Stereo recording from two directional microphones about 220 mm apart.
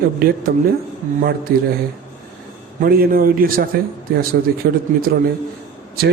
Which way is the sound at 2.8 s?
45° right (ahead or behind).